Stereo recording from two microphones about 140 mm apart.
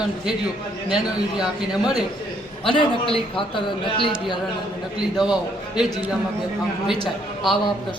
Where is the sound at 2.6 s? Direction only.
40° left (ahead or behind).